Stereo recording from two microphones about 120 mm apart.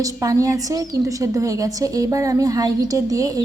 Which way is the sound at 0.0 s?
30° right (ahead or behind).